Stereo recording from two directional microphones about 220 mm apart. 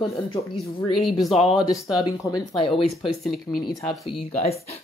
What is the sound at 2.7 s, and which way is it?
Speech, centre (ahead or behind).